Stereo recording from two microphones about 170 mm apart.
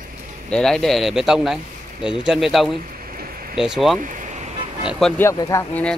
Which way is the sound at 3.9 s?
50° right (ahead or behind).